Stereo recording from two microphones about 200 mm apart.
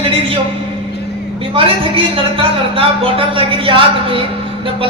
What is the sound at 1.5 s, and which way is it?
Speech, 25° right (ahead or behind).